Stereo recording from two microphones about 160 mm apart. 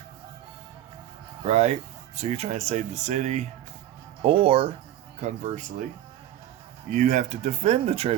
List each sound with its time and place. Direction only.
1.5 s speech: 45° right (ahead or behind)
4.2 s speech: 35° right (ahead or behind)
5.2 s speech: 50° right (ahead or behind)
6.9 s speech: 50° right (ahead or behind)